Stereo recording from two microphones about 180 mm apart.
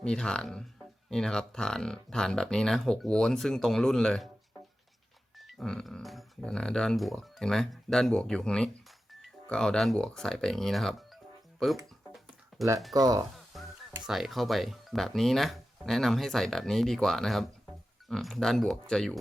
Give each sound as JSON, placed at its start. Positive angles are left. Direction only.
{"t": 0.0, "sound": "speech", "side_deg": 5}
{"t": 5.4, "sound": "speech", "side_deg": 0}
{"t": 12.5, "sound": "music", "side_deg": 0}
{"t": 12.9, "sound": "speech", "side_deg": -20}
{"t": 13.3, "sound": "speech", "side_deg": 0}